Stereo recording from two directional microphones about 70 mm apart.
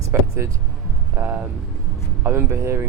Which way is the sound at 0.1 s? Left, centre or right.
Right.